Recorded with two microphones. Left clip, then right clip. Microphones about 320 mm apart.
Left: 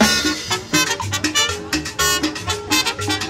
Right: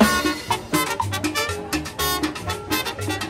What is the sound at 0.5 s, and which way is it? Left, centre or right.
Music, centre.